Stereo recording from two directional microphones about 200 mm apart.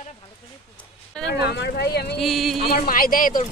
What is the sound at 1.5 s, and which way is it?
Speech, 55° left (ahead or behind).